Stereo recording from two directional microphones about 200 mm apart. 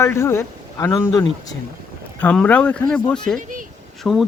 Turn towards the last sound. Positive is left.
turn(degrees=0)  # may be behind; listen again after turning